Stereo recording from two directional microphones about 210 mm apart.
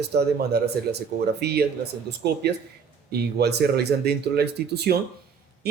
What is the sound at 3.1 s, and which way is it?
A man's voice, 50° right (ahead or behind).